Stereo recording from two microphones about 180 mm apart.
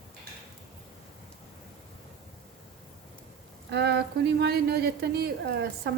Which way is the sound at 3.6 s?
70° right (ahead or behind).